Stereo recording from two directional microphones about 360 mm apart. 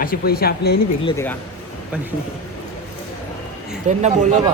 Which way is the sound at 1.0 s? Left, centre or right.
Centre.